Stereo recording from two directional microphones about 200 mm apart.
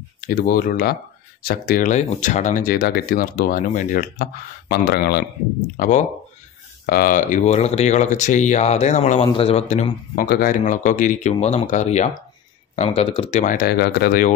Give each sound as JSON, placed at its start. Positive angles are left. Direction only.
{"t": 0.3, "sound": "speech", "side_deg": 50}
{"t": 5.8, "sound": "speech", "side_deg": 40}
{"t": 10.2, "sound": "speech", "side_deg": 50}